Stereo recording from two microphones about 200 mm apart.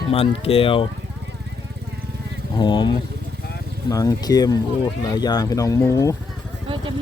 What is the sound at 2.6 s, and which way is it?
Speech, 20° left (ahead or behind).